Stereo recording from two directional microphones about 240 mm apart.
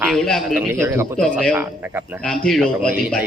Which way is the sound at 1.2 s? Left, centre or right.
Centre.